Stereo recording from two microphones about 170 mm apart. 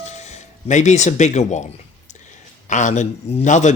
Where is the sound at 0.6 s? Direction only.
45° left (ahead or behind).